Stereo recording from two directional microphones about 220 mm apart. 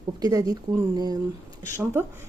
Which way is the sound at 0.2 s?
15° right (ahead or behind).